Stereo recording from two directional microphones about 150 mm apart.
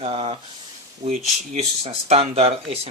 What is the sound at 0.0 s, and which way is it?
Speech, 40° right (ahead or behind).